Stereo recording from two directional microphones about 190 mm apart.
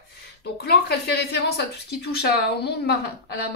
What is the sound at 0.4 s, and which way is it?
Speech, 60° left (ahead or behind).